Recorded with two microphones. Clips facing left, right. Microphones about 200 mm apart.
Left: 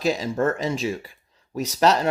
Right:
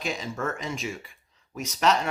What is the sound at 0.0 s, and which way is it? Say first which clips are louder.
Speech: left 9 dB; 35° left (ahead or behind).